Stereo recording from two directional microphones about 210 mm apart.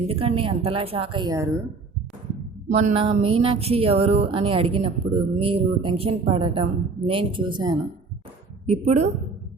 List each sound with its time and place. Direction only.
0.1 s a woman's voice: 30° right (ahead or behind)
2.6 s a woman's voice: 35° right (ahead or behind)
8.6 s a woman's voice: 35° right (ahead or behind)